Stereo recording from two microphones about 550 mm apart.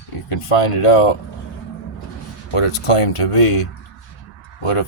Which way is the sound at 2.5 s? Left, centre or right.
Left.